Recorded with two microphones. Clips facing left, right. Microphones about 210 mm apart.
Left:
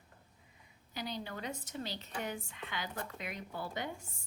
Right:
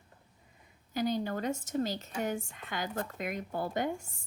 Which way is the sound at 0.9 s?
45° right (ahead or behind).